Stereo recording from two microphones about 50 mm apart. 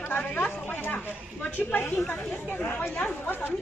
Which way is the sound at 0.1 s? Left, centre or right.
Left.